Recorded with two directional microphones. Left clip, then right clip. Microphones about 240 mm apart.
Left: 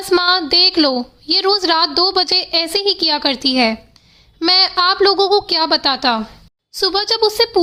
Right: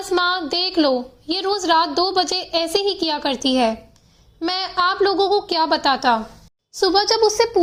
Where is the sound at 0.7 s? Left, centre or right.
Centre.